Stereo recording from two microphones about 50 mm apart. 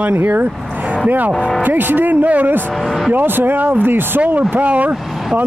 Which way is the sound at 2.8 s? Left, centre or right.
Centre.